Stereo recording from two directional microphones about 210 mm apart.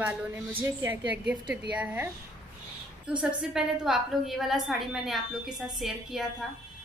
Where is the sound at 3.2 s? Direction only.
5° right (ahead or behind).